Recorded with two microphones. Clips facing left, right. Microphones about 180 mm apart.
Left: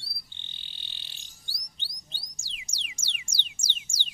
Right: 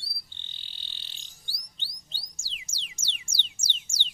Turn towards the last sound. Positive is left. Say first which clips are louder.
# right 1 dB
turn(degrees=15)  # may be behind; listen again after turning